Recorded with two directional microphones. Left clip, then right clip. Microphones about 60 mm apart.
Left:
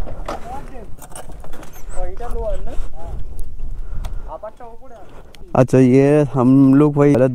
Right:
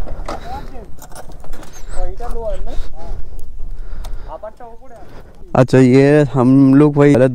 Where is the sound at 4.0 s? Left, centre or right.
Right.